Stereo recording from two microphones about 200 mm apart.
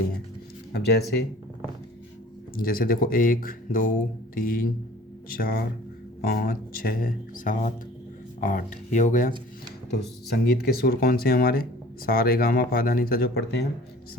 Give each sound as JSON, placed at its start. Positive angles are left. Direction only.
{"t": 0.7, "sound": "speech", "side_deg": 55}
{"t": 2.6, "sound": "speech", "side_deg": 45}
{"t": 9.9, "sound": "speech", "side_deg": 50}